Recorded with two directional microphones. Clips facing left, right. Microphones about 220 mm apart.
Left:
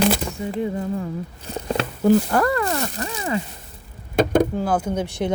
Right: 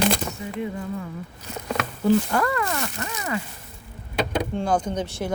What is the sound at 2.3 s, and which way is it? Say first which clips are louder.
Speech: left 4 dB; 35° left (ahead or behind).